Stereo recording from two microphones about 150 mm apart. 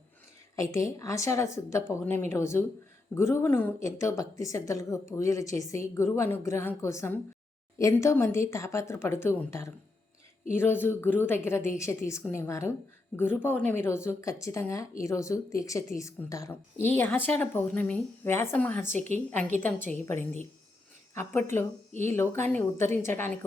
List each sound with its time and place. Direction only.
0.5 s a woman's voice: 20° left (ahead or behind)